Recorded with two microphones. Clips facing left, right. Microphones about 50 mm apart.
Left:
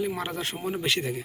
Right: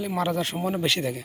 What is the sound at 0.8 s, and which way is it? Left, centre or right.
Speech, centre.